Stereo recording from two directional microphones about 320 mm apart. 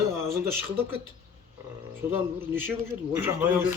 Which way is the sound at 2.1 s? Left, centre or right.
Centre.